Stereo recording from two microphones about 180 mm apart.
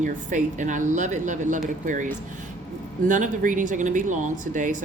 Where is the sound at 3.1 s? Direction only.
45° right (ahead or behind).